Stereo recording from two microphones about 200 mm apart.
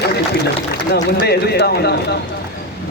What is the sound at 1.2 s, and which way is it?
Speech, 55° left (ahead or behind).